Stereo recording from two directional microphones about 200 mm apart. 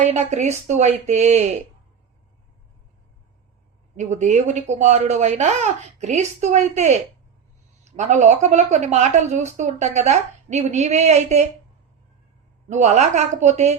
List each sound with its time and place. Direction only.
0.0 s a woman's voice: 35° right (ahead or behind)
3.9 s a woman's voice: 35° right (ahead or behind)
12.6 s a woman's voice: 35° right (ahead or behind)